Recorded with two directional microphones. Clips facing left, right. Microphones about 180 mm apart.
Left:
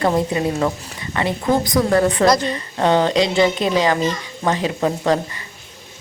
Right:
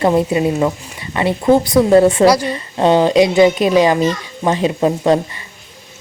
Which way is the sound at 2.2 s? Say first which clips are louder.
Right 4 dB; 10° right (ahead or behind).